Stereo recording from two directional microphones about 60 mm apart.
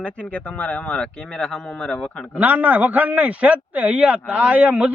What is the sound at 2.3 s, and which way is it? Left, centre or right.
A man's voice, right.